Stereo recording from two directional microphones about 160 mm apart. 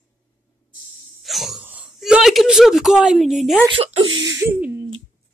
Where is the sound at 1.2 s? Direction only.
Centre (ahead or behind).